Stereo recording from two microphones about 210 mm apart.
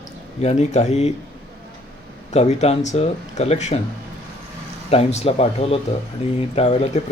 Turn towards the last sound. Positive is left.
turn(degrees=30)  # may be behind; listen again after turning